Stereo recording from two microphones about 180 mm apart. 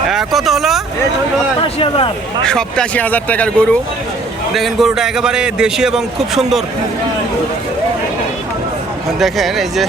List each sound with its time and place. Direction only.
0.1 s a man's voice: centre (ahead or behind)
1.6 s speech: 30° left (ahead or behind)
2.4 s a man's voice: 5° left (ahead or behind)
9.1 s a man's voice: centre (ahead or behind)